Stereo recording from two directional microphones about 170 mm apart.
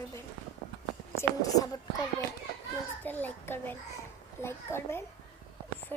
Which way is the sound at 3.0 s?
10° left (ahead or behind).